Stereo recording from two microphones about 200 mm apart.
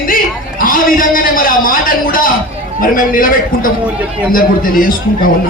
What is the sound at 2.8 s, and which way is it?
Speech, 45° left (ahead or behind).